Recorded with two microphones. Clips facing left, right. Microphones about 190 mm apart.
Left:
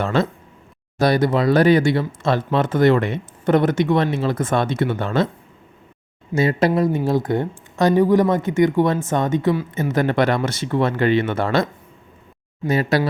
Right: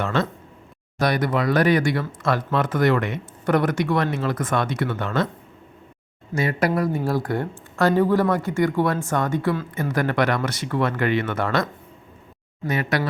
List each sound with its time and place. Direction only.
0.0 s speech: 35° left (ahead or behind)
6.3 s speech: 25° left (ahead or behind)
9.9 s speech: 25° left (ahead or behind)